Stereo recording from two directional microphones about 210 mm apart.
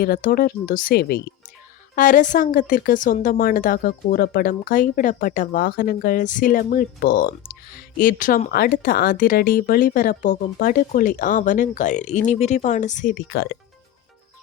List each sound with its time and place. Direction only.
0.0 s speech: 45° left (ahead or behind)